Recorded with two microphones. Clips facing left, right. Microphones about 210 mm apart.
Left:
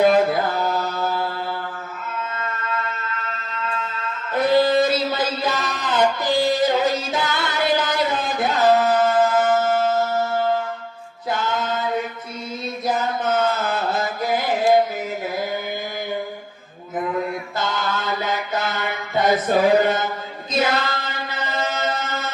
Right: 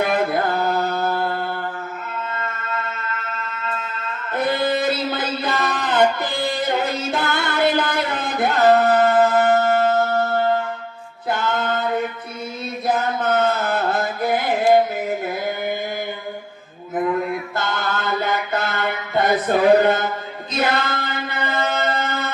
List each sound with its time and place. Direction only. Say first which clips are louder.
0.0 s mantra: left 3 dB; 55° right (ahead or behind)
4.4 s a sound: left 4 dB; 55° right (ahead or behind)
13.0 s carnatic music: right 1 dB; 55° right (ahead or behind)
17.6 s mantra: left 3 dB; 55° right (ahead or behind)
20.5 s chant: even; 55° right (ahead or behind)